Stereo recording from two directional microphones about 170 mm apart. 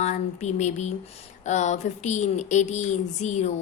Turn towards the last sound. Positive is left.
turn(degrees=40)  # may be behind; listen again after turning